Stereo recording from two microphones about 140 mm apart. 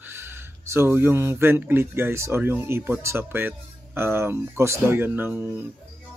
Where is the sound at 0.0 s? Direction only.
15° right (ahead or behind).